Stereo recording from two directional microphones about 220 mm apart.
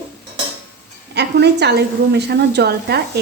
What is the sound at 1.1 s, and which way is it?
A woman's voice, 50° right (ahead or behind).